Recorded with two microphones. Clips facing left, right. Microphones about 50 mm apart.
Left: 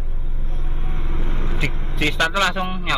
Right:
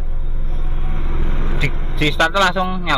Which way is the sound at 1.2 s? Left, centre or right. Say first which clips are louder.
Right 3 dB; centre.